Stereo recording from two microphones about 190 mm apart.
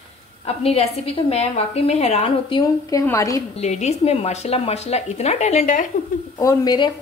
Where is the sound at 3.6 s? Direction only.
35° left (ahead or behind).